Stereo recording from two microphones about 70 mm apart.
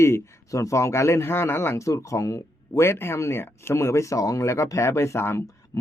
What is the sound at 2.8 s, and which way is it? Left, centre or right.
Speech, left.